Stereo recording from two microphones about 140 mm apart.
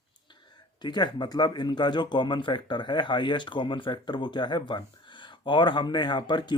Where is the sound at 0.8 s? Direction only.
30° left (ahead or behind).